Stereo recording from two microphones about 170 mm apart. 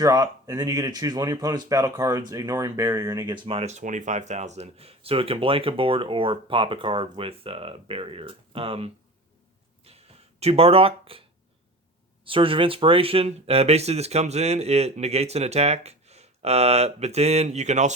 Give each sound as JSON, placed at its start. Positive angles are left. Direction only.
{"t": 0.0, "sound": "speech", "side_deg": -20}
{"t": 10.4, "sound": "speech", "side_deg": -35}